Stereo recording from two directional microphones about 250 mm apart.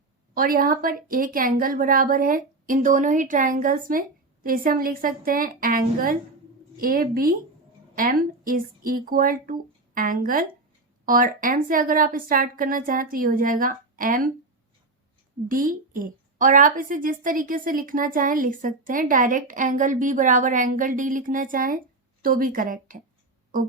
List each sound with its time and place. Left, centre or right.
0.3 s a woman's voice: right
15.4 s a woman's voice: right